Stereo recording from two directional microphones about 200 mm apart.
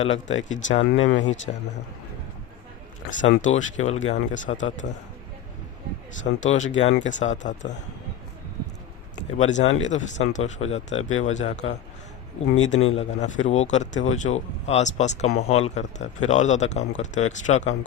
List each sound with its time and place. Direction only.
0.0 s speech: 35° left (ahead or behind)
1.0 s speech: 65° left (ahead or behind)
3.1 s speech: 40° left (ahead or behind)
6.4 s speech: 40° left (ahead or behind)
9.4 s speech: 35° left (ahead or behind)